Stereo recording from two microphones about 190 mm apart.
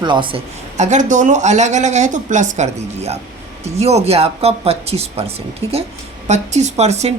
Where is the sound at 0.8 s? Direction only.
40° right (ahead or behind).